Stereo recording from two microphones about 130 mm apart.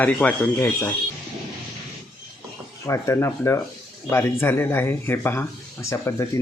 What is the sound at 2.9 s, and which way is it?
Speech, 20° left (ahead or behind).